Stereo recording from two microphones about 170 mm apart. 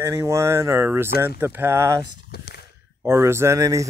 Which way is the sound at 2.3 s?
65° left (ahead or behind).